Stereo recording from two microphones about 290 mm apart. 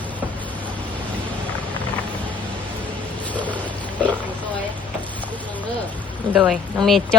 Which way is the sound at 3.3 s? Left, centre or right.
Centre.